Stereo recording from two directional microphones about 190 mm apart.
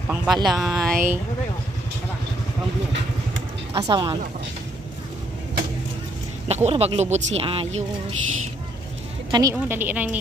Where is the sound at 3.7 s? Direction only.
25° right (ahead or behind).